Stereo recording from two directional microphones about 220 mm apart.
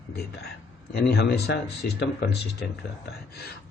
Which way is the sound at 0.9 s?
45° left (ahead or behind).